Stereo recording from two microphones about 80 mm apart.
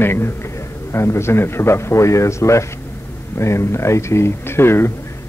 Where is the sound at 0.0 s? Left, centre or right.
Left.